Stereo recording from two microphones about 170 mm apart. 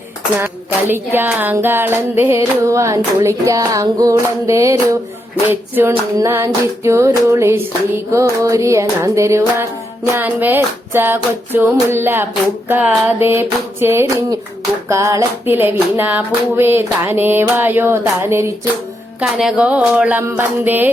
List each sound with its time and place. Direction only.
0.3 s music: 15° right (ahead or behind)
19.2 s music: 5° right (ahead or behind)